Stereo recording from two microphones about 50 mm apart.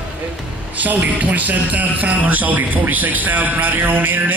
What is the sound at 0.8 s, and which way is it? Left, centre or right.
Speech, right.